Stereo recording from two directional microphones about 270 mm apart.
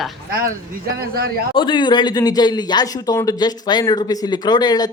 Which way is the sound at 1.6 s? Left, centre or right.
Centre.